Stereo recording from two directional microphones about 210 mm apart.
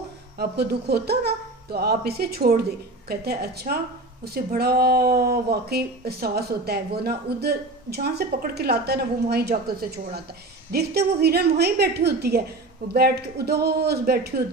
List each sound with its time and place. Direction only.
0.4 s a woman's voice: 50° right (ahead or behind)